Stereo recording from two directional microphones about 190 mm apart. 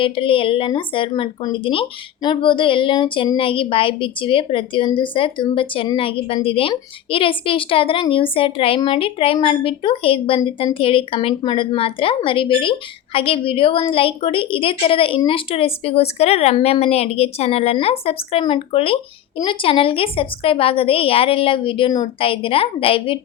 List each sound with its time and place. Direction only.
0.0 s speech: 30° left (ahead or behind)